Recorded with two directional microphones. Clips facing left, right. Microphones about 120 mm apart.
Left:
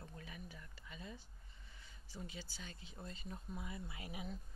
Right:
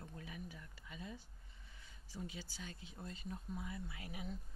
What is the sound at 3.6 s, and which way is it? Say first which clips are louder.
Speech: right 1 dB; 15° left (ahead or behind).